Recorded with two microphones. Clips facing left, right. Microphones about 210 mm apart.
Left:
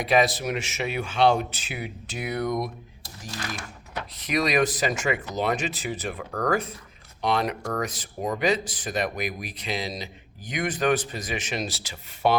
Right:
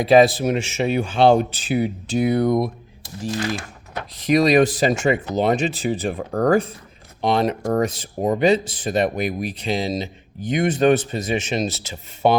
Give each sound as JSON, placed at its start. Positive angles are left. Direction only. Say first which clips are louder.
{"t": 0.0, "sound": "speech", "louder": "right 8 dB", "side_deg": -30}